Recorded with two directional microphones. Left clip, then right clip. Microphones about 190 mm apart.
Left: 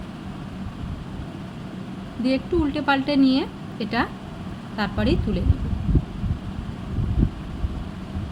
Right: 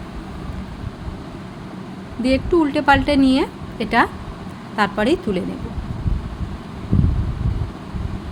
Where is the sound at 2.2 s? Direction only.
20° right (ahead or behind).